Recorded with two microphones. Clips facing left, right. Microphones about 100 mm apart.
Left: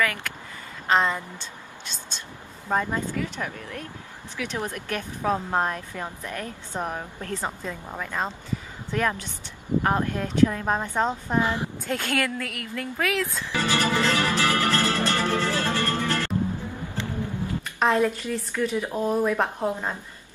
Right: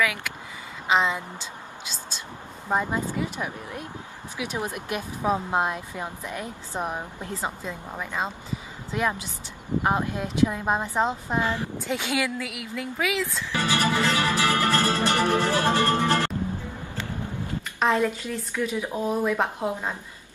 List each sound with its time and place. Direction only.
0.0 s speech: 5° right (ahead or behind)
2.7 s speech: 15° right (ahead or behind)
11.4 s speech: 15° left (ahead or behind)
11.8 s speech: 5° right (ahead or behind)
13.5 s music: 20° right (ahead or behind)
17.7 s speech: centre (ahead or behind)